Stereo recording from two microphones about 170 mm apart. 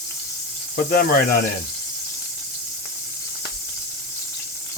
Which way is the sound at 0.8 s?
65° left (ahead or behind).